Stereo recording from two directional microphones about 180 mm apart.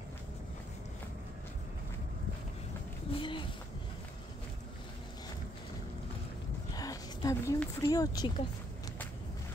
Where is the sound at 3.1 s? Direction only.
25° left (ahead or behind).